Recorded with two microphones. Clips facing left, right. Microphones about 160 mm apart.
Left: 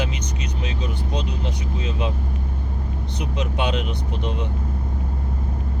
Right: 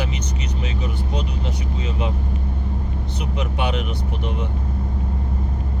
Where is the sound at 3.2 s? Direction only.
20° left (ahead or behind).